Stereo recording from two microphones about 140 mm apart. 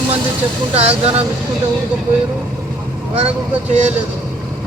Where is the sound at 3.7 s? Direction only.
55° right (ahead or behind).